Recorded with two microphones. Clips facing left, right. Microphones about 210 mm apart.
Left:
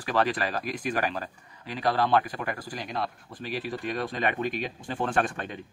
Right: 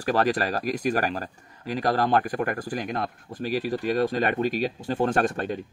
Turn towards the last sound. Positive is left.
turn(degrees=-40)  # may be behind; listen again after turning